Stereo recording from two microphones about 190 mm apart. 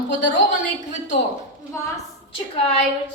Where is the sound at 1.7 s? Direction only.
15° left (ahead or behind).